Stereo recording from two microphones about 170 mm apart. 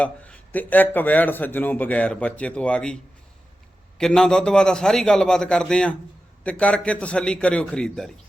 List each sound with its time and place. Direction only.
0.0 s a man's voice: 10° left (ahead or behind)